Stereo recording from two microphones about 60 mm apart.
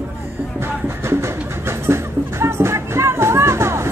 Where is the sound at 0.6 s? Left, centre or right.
Right.